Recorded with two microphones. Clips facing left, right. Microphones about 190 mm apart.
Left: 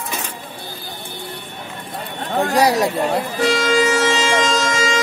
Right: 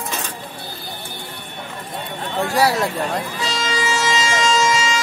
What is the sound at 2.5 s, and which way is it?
Speech, 20° left (ahead or behind).